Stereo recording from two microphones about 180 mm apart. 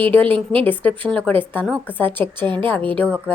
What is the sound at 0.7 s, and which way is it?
A woman's voice, 10° left (ahead or behind).